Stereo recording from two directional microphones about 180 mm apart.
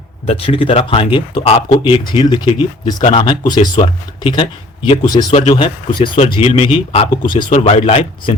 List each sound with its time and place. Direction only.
0.3 s speech: 30° left (ahead or behind)
3.0 s speech: 35° left (ahead or behind)
3.4 s speech: 25° left (ahead or behind)